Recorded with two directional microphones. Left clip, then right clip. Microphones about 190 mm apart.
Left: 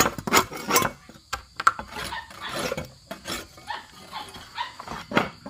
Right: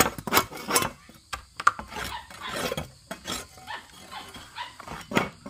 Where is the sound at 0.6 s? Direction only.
20° left (ahead or behind).